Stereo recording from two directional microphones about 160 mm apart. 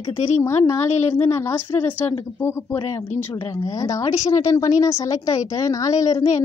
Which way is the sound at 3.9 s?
20° left (ahead or behind).